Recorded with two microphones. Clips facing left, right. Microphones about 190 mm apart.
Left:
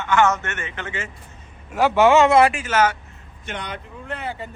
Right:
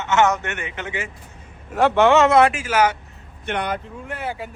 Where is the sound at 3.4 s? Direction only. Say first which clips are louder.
Right 7 dB; 60° right (ahead or behind).